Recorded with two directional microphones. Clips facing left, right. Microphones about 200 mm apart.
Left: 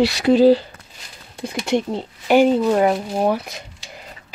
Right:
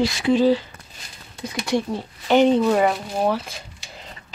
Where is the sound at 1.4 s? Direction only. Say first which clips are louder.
Left 2 dB; 25° left (ahead or behind).